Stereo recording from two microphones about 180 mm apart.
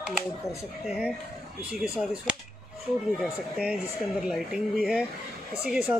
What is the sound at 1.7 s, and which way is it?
Speech, 5° right (ahead or behind).